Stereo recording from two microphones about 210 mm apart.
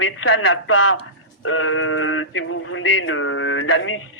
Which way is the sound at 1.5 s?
75° left (ahead or behind).